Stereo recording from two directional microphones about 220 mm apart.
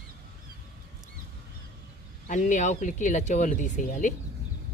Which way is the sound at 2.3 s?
35° left (ahead or behind).